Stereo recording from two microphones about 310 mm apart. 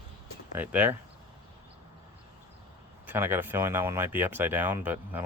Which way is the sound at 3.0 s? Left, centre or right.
Centre.